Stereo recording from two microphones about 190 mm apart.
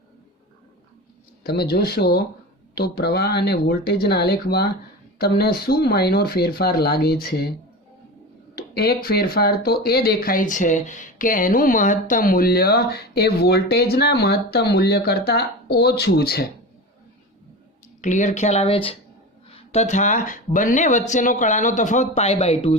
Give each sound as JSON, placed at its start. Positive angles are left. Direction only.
{"t": 1.5, "sound": "speech", "side_deg": 55}
{"t": 8.5, "sound": "speech", "side_deg": 55}
{"t": 18.0, "sound": "speech", "side_deg": 40}